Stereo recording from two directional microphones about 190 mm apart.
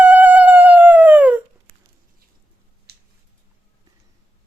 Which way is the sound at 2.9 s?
55° right (ahead or behind).